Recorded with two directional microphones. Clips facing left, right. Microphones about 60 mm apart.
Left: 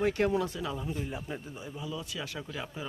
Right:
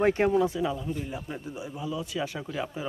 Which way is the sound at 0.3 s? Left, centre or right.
Centre.